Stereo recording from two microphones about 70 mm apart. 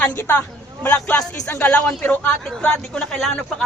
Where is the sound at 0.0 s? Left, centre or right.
Left.